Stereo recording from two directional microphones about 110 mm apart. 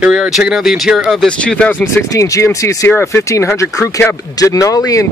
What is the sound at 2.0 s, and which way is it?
Speech, 30° left (ahead or behind).